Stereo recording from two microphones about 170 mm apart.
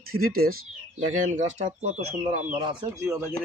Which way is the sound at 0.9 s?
45° right (ahead or behind).